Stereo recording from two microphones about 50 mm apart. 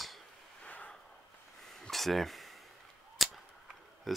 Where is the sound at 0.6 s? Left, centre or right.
Left.